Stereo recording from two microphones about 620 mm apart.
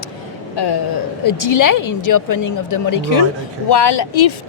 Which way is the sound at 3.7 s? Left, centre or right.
Left.